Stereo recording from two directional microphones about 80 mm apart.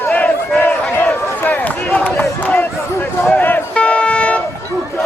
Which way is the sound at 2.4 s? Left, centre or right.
Centre.